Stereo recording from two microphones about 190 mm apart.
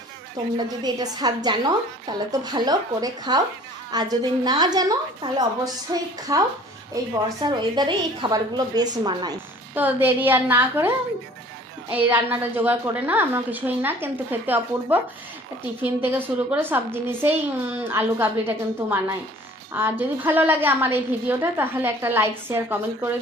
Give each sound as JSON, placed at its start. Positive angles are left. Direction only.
{"t": 0.4, "sound": "a woman's voice", "side_deg": -20}
{"t": 9.7, "sound": "a woman's voice", "side_deg": -10}
{"t": 16.0, "sound": "a woman's voice", "side_deg": -10}